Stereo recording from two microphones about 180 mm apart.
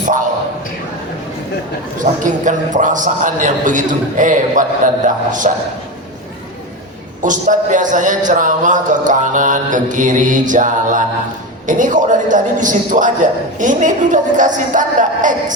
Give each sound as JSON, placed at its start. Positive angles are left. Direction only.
{"t": 2.0, "sound": "mantra", "side_deg": -45}
{"t": 7.2, "sound": "mantra", "side_deg": -45}